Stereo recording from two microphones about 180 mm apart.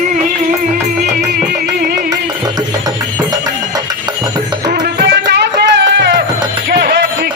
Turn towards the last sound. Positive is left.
turn(degrees=-65)  # may be behind; listen again after turning